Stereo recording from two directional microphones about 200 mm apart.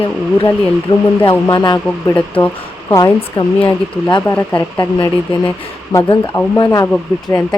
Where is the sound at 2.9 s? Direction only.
25° left (ahead or behind).